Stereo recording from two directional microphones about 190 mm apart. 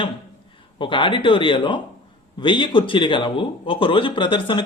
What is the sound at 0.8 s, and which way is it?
A man's voice, 25° left (ahead or behind).